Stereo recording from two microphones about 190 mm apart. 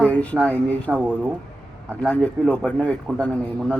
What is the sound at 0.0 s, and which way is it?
Speech, 5° left (ahead or behind).